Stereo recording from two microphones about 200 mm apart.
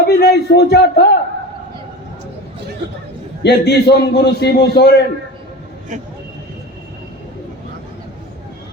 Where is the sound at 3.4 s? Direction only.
55° left (ahead or behind).